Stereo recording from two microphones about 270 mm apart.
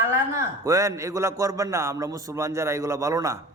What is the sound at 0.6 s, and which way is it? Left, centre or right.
A man's voice, centre.